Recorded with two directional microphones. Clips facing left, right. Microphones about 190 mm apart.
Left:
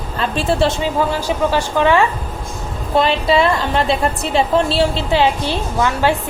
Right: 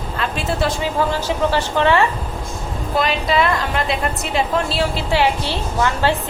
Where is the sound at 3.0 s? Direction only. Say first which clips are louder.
Left 4 dB; 30° left (ahead or behind).